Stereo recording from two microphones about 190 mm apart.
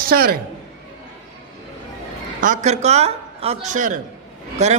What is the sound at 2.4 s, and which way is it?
A man's voice, 40° right (ahead or behind).